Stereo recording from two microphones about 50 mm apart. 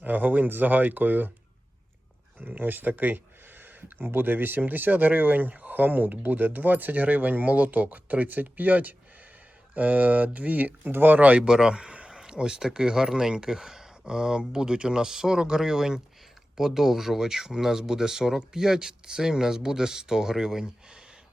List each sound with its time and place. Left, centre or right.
0.0 s speech: right
2.4 s speech: right
11.4 s speech: centre